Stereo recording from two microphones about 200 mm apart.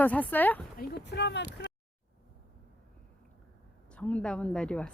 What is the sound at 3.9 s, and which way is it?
Speech, 5° left (ahead or behind).